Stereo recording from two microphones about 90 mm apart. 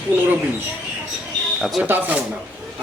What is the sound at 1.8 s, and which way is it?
Speech, 20° right (ahead or behind).